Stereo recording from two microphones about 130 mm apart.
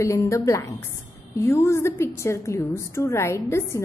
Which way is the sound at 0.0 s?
20° left (ahead or behind).